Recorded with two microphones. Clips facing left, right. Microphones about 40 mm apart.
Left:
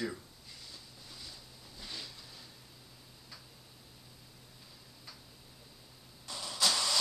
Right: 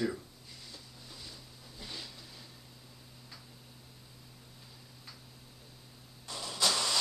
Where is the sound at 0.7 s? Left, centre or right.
Centre.